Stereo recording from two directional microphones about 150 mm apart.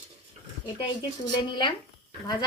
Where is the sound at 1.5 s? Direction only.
30° left (ahead or behind).